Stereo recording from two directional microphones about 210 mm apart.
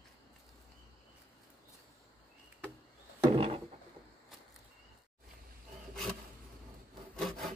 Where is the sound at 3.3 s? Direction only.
25° right (ahead or behind).